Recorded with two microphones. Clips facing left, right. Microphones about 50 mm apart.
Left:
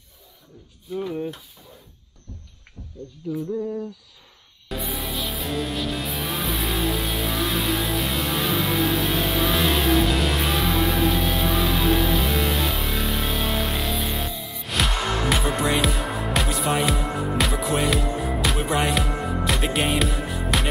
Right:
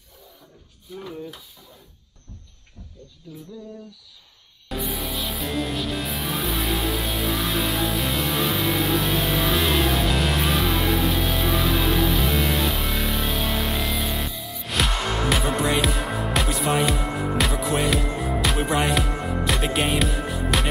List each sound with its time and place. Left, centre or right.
0.9 s speech: centre
3.3 s a sound: left
4.6 s music: centre